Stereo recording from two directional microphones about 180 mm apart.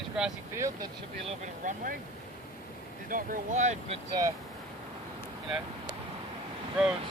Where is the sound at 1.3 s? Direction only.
45° right (ahead or behind).